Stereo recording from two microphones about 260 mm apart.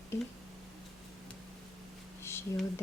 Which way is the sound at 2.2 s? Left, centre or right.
Centre.